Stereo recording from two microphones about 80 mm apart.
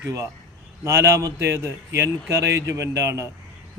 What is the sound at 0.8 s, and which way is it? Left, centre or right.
A man's voice, right.